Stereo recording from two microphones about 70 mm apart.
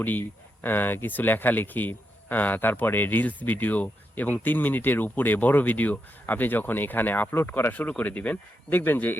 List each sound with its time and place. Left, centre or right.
0.0 s speech: left